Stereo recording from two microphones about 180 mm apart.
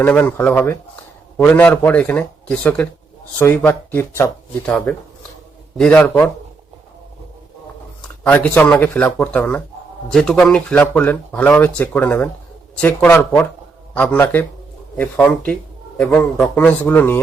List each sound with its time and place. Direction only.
0.0 s speech: 10° left (ahead or behind)
8.2 s speech: 10° left (ahead or behind)